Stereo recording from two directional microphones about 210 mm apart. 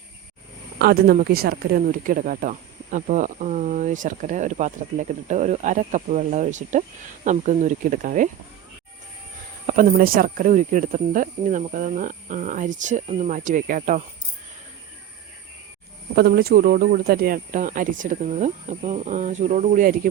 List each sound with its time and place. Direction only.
0.8 s speech: 45° right (ahead or behind)
9.6 s speech: 40° right (ahead or behind)
16.1 s speech: 50° right (ahead or behind)